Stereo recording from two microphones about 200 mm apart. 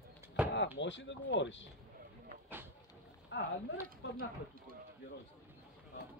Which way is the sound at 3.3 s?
65° left (ahead or behind).